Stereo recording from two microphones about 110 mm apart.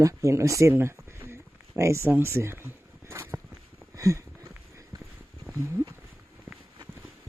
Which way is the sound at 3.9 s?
30° right (ahead or behind).